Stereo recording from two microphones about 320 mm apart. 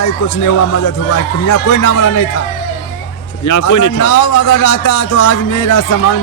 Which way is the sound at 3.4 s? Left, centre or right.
Left.